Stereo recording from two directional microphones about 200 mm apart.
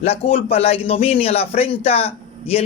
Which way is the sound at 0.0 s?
30° left (ahead or behind).